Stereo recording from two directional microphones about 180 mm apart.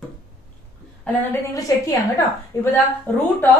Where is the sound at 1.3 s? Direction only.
20° left (ahead or behind).